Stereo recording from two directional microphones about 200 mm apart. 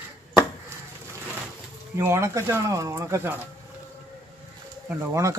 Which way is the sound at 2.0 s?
10° right (ahead or behind).